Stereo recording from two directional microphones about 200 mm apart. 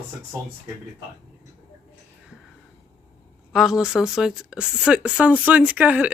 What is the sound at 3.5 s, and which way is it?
Speech, centre (ahead or behind).